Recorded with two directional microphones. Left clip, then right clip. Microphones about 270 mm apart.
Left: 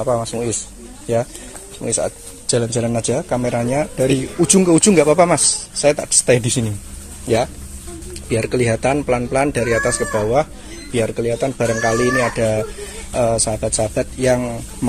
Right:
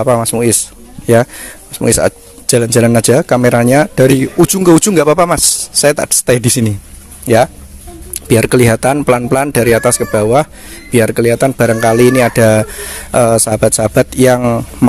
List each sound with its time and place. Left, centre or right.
0.0 s speech: right
8.1 s speech: right